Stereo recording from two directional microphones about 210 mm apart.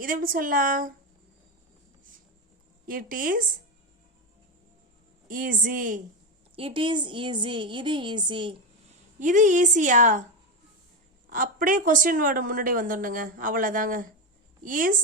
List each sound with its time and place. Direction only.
0.0 s a woman's voice: 40° right (ahead or behind)
2.8 s a woman's voice: 40° right (ahead or behind)
5.3 s a woman's voice: 40° right (ahead or behind)
6.6 s a woman's voice: 25° right (ahead or behind)
9.1 s a woman's voice: 35° right (ahead or behind)
11.3 s a woman's voice: 40° right (ahead or behind)